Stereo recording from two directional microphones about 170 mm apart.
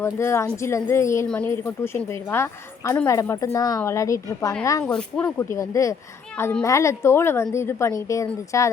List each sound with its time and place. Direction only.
0.0 s a woman's voice: 15° left (ahead or behind)
4.9 s a woman's voice: 5° left (ahead or behind)
5.4 s a woman's voice: 15° left (ahead or behind)